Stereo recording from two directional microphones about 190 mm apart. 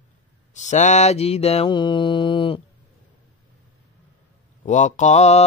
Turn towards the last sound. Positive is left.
turn(degrees=35)  # may be behind; listen again after turning